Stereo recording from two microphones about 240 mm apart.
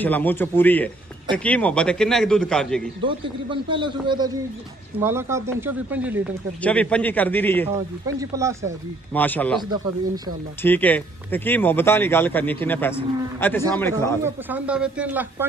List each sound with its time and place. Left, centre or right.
0.0 s a man's voice: centre
3.0 s speech: right
6.6 s speech: centre
7.7 s speech: centre
9.1 s speech: centre
9.6 s speech: centre
10.6 s speech: centre
14.2 s speech: centre